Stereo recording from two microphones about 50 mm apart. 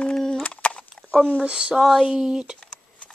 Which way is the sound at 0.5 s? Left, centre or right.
Left.